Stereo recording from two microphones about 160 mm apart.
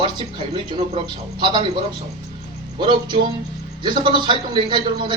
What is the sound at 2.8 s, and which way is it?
A man's voice, 30° right (ahead or behind).